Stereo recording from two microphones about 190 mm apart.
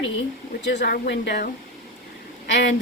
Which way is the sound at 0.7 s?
55° left (ahead or behind).